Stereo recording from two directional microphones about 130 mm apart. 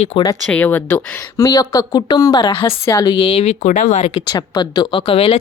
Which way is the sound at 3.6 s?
70° left (ahead or behind).